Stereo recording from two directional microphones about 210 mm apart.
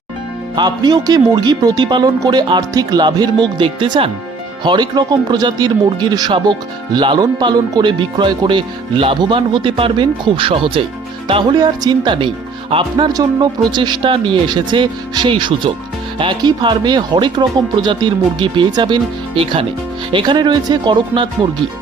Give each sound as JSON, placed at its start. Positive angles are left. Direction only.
{"t": 0.5, "sound": "speech", "side_deg": -20}